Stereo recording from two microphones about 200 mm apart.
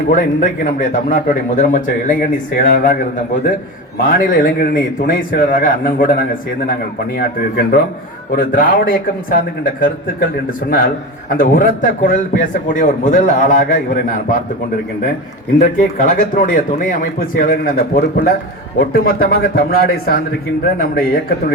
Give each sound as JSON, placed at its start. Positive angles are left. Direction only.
{"t": 0.1, "sound": "a man's voice", "side_deg": 40}
{"t": 4.0, "sound": "speech", "side_deg": 45}
{"t": 11.3, "sound": "speech", "side_deg": 45}
{"t": 15.5, "sound": "speech", "side_deg": 40}